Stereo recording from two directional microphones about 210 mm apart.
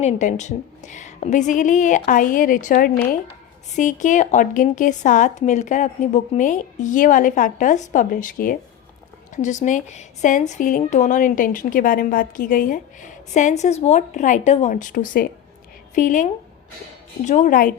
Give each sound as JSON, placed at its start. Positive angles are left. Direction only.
{"t": 0.0, "sound": "a woman's voice", "side_deg": 35}